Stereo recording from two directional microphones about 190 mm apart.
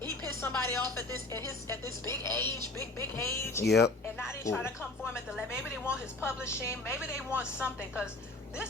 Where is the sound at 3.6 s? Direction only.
60° left (ahead or behind).